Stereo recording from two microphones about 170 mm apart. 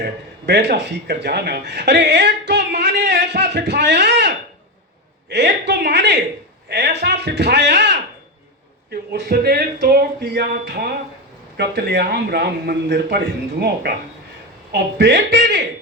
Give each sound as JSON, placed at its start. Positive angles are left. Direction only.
{"t": 0.0, "sound": "speech", "side_deg": -85}
{"t": 5.3, "sound": "a man's voice", "side_deg": -85}
{"t": 8.9, "sound": "a man's voice", "side_deg": -70}